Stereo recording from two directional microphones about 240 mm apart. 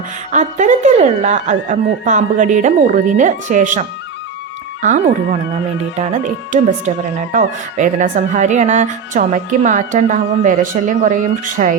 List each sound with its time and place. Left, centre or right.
0.3 s speech: right